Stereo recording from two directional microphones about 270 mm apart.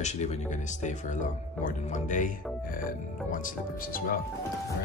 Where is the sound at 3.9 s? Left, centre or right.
Left.